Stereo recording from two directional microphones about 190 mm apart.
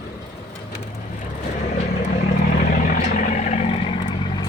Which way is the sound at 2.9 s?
40° left (ahead or behind).